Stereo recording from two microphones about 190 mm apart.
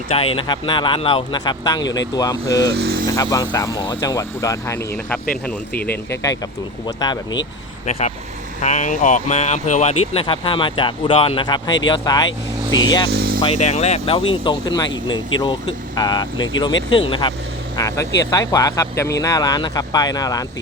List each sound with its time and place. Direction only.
0.3 s speech: 25° left (ahead or behind)
2.7 s vehicle: 55° right (ahead or behind)
3.1 s speech: 20° left (ahead or behind)
6.8 s speech: 20° left (ahead or behind)
7.9 s speech: 35° left (ahead or behind)
13.1 s vehicle: 55° right (ahead or behind)
13.4 s speech: 35° left (ahead or behind); by 20.4 s 20° left (ahead or behind)